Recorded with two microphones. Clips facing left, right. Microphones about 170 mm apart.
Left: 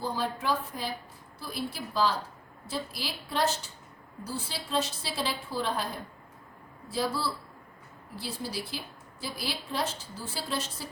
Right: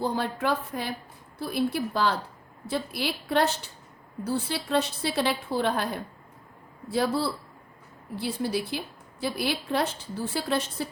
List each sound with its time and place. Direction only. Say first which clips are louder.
0.0 s a woman's voice: right 4 dB; 60° right (ahead or behind)
6.9 s a woman's voice: right 5 dB; 60° right (ahead or behind)